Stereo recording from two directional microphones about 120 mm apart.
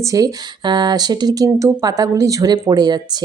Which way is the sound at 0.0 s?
30° right (ahead or behind).